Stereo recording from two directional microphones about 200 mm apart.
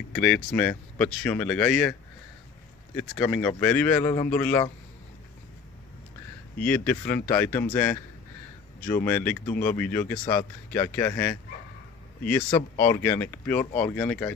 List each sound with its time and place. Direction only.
0.1 s speech: 5° left (ahead or behind)
3.0 s speech: 5° left (ahead or behind)
6.6 s speech: 10° left (ahead or behind)
12.5 s speech: 15° left (ahead or behind)